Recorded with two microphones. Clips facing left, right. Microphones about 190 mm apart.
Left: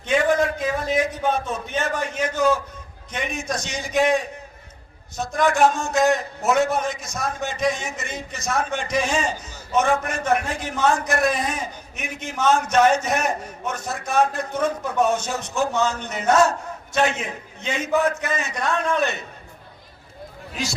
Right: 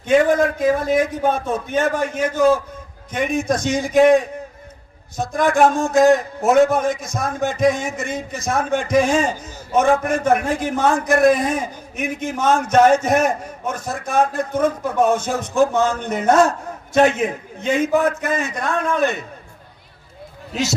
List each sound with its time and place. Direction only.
0.1 s a man's voice: 50° right (ahead or behind)